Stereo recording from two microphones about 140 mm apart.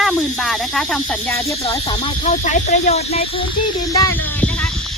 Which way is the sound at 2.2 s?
60° left (ahead or behind).